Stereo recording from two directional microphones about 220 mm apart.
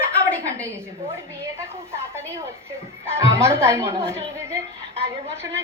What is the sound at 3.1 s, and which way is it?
A woman's voice, 10° right (ahead or behind).